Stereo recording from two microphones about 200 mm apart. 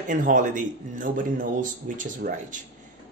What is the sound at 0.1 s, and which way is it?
Speech, 40° right (ahead or behind).